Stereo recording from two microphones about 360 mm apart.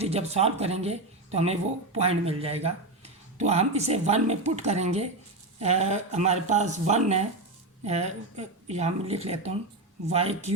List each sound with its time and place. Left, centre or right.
0.0 s a woman's voice: centre